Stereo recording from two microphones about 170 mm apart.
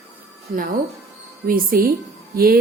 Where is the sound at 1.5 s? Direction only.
60° right (ahead or behind).